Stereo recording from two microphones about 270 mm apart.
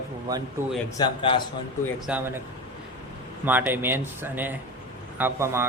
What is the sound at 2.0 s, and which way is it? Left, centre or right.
Speech, centre.